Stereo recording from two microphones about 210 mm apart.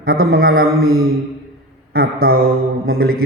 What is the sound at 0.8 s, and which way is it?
Mantra, 85° right.